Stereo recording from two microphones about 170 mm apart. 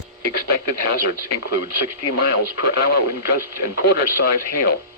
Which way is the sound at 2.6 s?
70° left (ahead or behind).